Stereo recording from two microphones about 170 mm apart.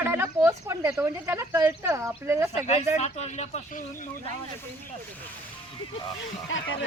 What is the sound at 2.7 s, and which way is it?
A man's voice, 40° left (ahead or behind).